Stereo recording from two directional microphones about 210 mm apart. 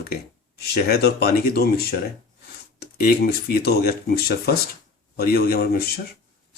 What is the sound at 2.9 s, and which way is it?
Speech, 45° left (ahead or behind).